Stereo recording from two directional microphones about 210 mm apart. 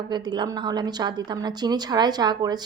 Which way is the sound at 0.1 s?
20° right (ahead or behind).